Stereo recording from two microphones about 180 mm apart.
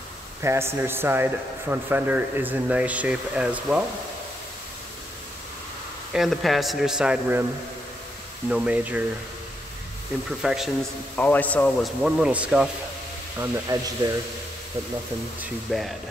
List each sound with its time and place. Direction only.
0.4 s speech: 15° right (ahead or behind)
6.1 s a man's voice: centre (ahead or behind)
8.5 s speech: 5° right (ahead or behind)
10.4 s a man's voice: centre (ahead or behind)
11.1 s a man's voice: 10° left (ahead or behind)
12.0 s a man's voice: 5° right (ahead or behind)
13.4 s speech: 20° right (ahead or behind)
15.4 s a man's voice: centre (ahead or behind)